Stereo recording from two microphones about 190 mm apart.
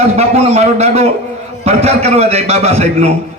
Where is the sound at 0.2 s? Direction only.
35° right (ahead or behind).